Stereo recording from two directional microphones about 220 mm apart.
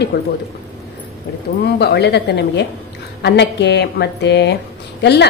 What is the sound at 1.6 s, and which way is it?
A woman's voice, 50° left (ahead or behind).